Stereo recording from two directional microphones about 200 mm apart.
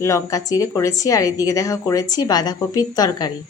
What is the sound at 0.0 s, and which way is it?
Speech, 15° left (ahead or behind).